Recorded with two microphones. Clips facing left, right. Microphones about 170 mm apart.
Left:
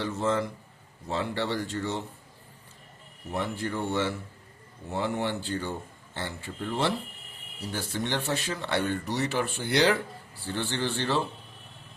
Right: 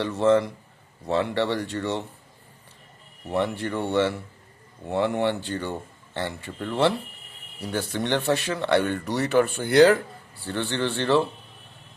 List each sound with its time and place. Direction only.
0.0 s a man's voice: 70° right (ahead or behind)
3.2 s speech: 65° right (ahead or behind)
10.4 s speech: 60° right (ahead or behind)